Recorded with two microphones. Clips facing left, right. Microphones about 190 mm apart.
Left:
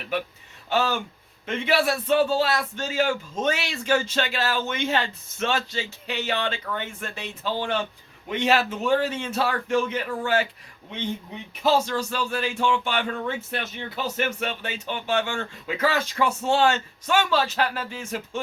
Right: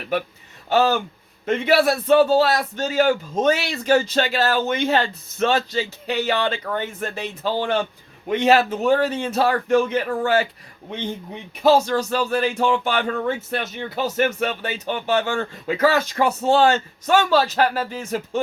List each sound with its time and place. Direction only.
0.7 s speech: 40° right (ahead or behind)
11.6 s speech: 45° right (ahead or behind)